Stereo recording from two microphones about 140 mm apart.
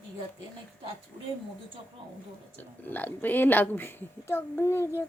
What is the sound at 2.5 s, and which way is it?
A woman's voice, 15° left (ahead or behind).